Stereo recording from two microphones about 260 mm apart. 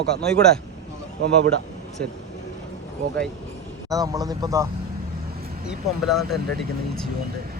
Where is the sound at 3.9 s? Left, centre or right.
Centre.